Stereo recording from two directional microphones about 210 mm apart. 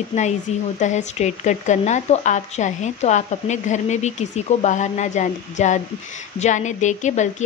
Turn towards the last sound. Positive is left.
turn(degrees=35)  # may be behind; listen again after turning